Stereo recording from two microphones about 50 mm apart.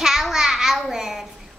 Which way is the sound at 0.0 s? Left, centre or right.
Centre.